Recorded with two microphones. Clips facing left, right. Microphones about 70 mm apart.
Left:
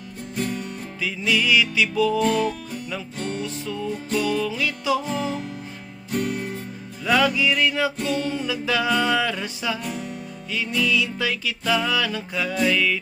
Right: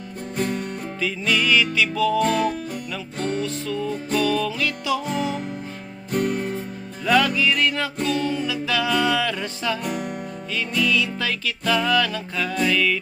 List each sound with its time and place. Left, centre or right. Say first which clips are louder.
0.3 s music: right 2 dB; right
1.0 s music: even; centre
2.1 s music: right 1 dB; right
4.3 s music: right 1 dB; centre
6.1 s music: right 3 dB; right
7.0 s music: right 1 dB; centre
8.0 s music: right 1 dB; left
9.3 s music: right 1 dB; centre
9.8 s music: right 3 dB; right
10.8 s music: right 1 dB; centre